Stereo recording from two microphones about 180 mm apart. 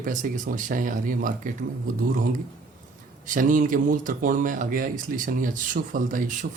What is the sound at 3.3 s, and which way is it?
Speech, 50° right (ahead or behind).